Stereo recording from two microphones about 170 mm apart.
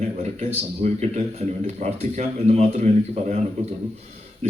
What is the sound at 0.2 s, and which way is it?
A man's voice, 40° right (ahead or behind).